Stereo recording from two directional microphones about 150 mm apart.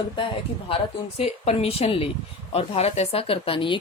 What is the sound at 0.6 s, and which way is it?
A woman's voice, 40° left (ahead or behind).